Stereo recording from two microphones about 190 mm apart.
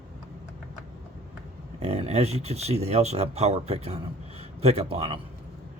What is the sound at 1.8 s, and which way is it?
Speech, 35° right (ahead or behind).